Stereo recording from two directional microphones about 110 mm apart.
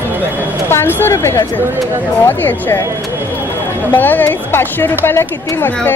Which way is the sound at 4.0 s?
15° left (ahead or behind).